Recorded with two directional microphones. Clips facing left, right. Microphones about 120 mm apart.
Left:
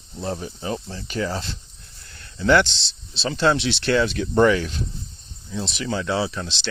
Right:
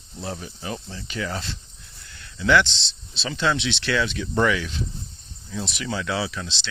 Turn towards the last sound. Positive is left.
turn(degrees=35)  # may be behind; listen again after turning